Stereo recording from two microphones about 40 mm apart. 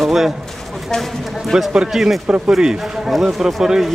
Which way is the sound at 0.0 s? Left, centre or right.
Centre.